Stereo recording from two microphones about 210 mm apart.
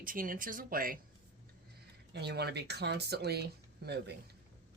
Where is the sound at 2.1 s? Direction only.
50° right (ahead or behind).